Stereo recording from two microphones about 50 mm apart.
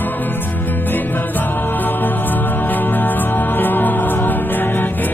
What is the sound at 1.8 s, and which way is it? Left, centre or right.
Music, left.